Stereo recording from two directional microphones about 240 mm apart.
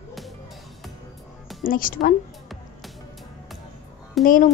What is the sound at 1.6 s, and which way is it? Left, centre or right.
Speech, left.